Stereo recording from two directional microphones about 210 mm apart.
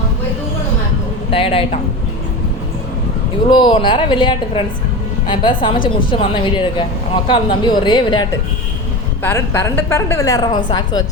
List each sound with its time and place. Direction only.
1.3 s a woman's voice: 25° left (ahead or behind)
3.5 s a woman's voice: 25° left (ahead or behind)